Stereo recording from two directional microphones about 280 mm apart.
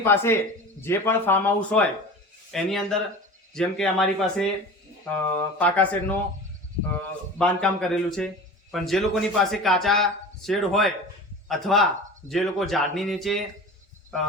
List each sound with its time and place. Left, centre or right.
0.0 s speech: centre
7.3 s speech: centre